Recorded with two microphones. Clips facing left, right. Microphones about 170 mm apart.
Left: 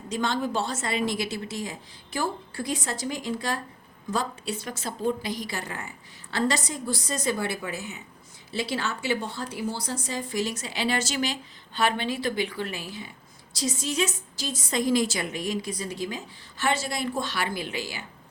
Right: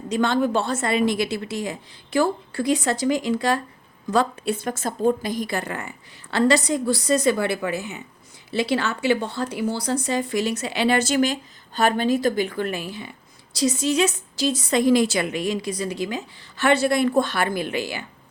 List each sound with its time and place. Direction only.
0.1 s a woman's voice: 60° right (ahead or behind); by 3.6 s 85° right
4.1 s a woman's voice: 60° right (ahead or behind)
13.6 s a woman's voice: 75° right (ahead or behind); by 18.0 s 60° right (ahead or behind)